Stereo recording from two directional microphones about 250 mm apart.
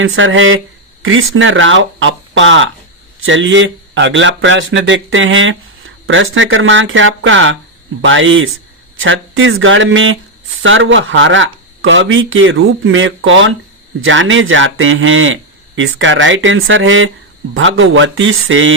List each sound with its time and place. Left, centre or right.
0.0 s speech: right